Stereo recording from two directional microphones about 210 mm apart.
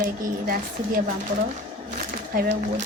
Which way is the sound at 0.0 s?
45° right (ahead or behind).